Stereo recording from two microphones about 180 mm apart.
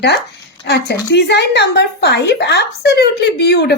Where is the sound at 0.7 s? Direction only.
70° left (ahead or behind).